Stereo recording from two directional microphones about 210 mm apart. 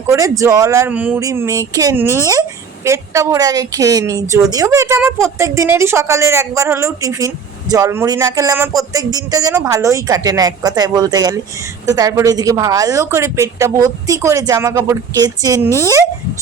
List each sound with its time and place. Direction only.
0.1 s a woman's voice: 15° right (ahead or behind)